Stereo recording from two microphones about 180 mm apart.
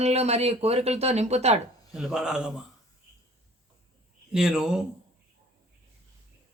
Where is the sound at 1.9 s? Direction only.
Centre (ahead or behind).